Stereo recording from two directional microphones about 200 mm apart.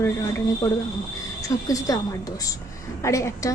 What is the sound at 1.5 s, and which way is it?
Speech, 15° left (ahead or behind).